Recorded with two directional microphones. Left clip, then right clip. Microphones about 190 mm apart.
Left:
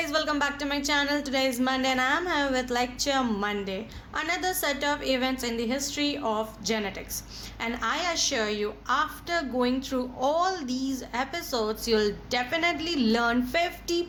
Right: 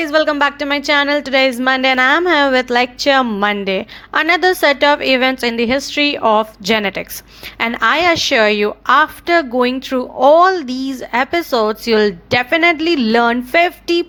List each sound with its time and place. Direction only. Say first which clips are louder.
0.0 s a woman's voice: right 13 dB; 35° right (ahead or behind)